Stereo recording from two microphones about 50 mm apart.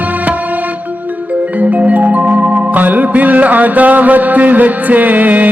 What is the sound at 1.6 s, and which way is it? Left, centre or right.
Music, right.